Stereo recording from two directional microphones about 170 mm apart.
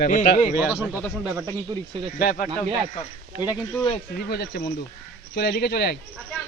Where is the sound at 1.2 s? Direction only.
20° right (ahead or behind).